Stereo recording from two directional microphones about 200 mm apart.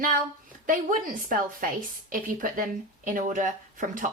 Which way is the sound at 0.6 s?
40° right (ahead or behind).